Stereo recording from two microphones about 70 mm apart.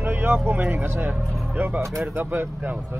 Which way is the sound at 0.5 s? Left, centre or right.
Right.